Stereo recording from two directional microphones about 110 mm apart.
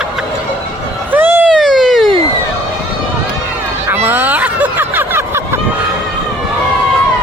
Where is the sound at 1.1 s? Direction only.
20° right (ahead or behind).